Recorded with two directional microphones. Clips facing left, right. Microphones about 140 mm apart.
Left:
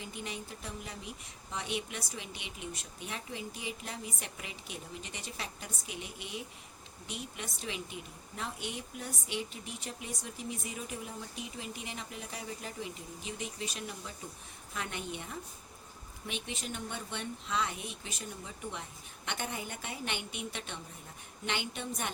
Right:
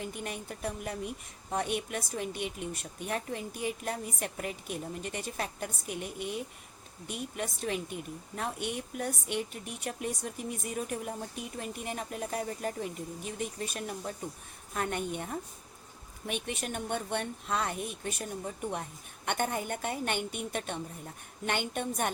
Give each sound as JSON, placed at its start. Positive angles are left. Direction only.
{"t": 0.0, "sound": "speech", "side_deg": -55}